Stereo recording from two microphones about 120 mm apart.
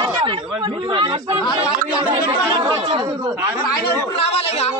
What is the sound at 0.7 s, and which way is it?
Speech, 40° right (ahead or behind).